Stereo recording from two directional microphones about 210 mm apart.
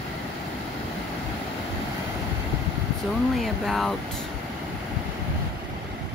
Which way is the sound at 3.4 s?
Centre (ahead or behind).